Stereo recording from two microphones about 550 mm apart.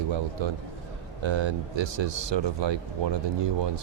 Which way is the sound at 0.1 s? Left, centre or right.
Right.